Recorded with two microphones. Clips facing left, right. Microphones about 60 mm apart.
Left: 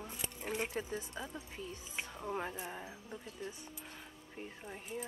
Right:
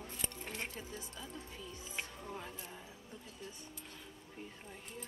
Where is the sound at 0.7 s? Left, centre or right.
Left.